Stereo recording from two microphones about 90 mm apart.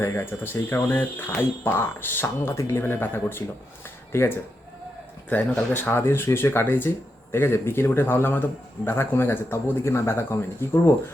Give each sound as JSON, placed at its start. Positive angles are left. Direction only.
{"t": 0.0, "sound": "speech", "side_deg": 30}
{"t": 5.3, "sound": "speech", "side_deg": 15}